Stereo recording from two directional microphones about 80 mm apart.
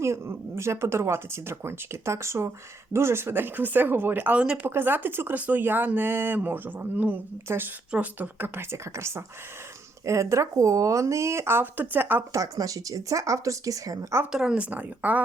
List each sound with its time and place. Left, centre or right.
0.0 s speech: right; by 4.6 s centre
4.6 s speech: right
12.3 s speech: right
14.3 s speech: centre